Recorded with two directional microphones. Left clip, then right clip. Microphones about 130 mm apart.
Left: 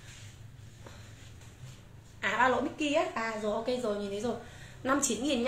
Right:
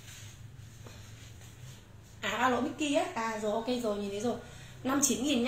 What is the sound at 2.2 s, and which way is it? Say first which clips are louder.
A woman's voice: left 2 dB; 35° left (ahead or behind).